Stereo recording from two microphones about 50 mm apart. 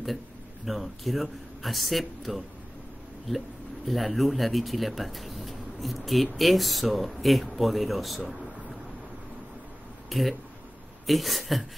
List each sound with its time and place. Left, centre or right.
0.7 s a man's voice: centre
10.0 s a man's voice: centre